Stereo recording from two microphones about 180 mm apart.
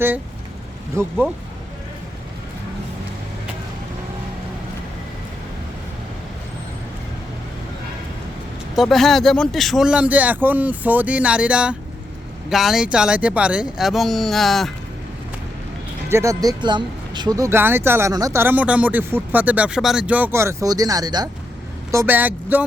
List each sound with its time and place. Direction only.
1.0 s speech: 15° right (ahead or behind)
8.7 s speech: centre (ahead or behind)
16.0 s speech: 15° right (ahead or behind)
21.9 s speech: 10° right (ahead or behind)